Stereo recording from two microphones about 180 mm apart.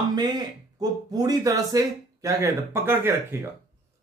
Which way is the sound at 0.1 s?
20° right (ahead or behind).